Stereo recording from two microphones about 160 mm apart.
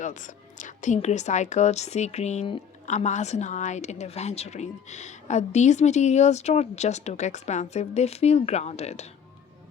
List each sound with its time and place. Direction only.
0.0 s speech: 50° left (ahead or behind)